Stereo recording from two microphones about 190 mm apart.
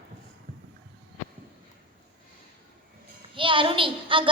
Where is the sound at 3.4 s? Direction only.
25° right (ahead or behind).